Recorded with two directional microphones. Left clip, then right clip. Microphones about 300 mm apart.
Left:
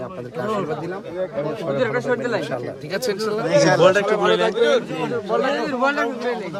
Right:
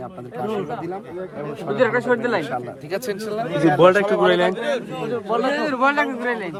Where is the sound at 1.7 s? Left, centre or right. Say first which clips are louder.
Right 4 dB; right.